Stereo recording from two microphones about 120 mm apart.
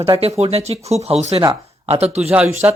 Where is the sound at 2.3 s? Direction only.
15° right (ahead or behind).